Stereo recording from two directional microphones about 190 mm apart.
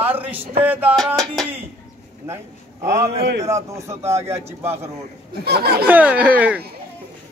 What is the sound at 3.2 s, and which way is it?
Speech, 60° right (ahead or behind).